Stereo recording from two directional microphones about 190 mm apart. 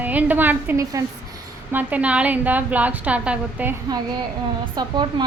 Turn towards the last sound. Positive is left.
turn(degrees=-25)  # may be behind; listen again after turning